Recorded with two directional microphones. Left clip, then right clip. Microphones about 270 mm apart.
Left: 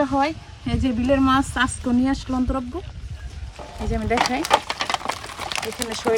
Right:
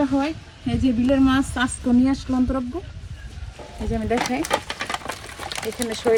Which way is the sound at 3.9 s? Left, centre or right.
Centre.